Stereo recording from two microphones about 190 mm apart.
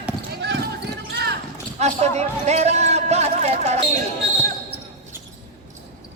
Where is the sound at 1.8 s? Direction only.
35° right (ahead or behind).